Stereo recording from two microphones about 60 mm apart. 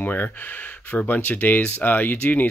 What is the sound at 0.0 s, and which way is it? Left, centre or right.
Speech, left.